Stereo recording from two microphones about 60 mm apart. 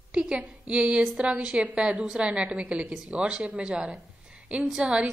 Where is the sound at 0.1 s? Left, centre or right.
Centre.